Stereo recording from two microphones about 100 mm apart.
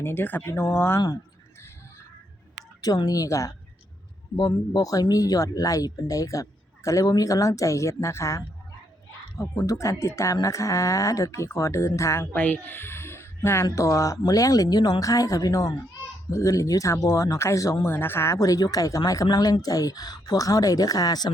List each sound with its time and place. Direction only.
0.0 s speech: 20° left (ahead or behind)
2.8 s speech: 40° left (ahead or behind)
4.4 s speech: 45° left (ahead or behind)
12.3 s speech: 15° left (ahead or behind); by 17.8 s 35° left (ahead or behind)
17.8 s speech: 20° left (ahead or behind)
18.3 s speech: 35° left (ahead or behind)